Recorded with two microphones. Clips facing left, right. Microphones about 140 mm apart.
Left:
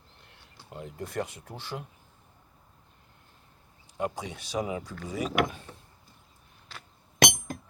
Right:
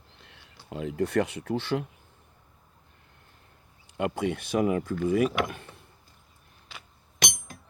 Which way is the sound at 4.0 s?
65° right (ahead or behind).